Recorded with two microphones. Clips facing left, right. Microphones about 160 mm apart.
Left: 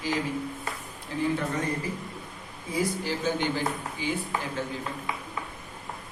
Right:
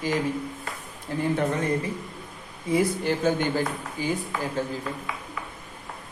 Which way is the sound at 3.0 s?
50° right (ahead or behind).